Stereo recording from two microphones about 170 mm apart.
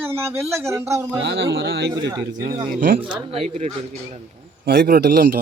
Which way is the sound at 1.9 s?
25° right (ahead or behind).